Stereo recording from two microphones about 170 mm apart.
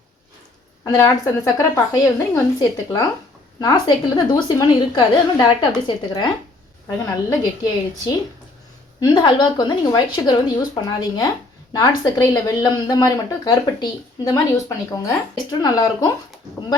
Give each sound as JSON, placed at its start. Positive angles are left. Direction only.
{"t": 0.9, "sound": "a woman's voice", "side_deg": 20}